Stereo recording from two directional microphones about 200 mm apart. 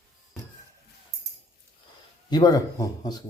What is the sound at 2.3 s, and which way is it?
Speech, 20° left (ahead or behind).